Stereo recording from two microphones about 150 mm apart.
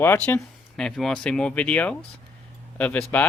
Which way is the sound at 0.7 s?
5° left (ahead or behind).